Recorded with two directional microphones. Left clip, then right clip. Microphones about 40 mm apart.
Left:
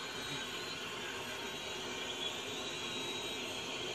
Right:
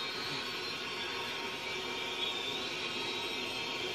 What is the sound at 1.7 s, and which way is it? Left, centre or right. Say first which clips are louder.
Vehicle: right 4 dB; centre.